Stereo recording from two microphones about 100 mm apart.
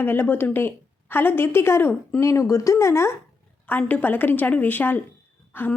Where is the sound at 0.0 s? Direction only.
20° left (ahead or behind).